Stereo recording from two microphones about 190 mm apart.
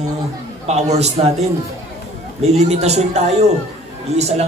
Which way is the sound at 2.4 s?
35° right (ahead or behind).